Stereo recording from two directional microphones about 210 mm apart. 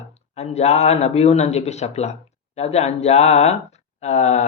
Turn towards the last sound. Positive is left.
turn(degrees=35)  # may be behind; listen again after turning